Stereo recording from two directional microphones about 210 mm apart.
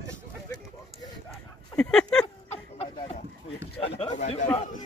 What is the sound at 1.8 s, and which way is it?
Speech, 5° left (ahead or behind).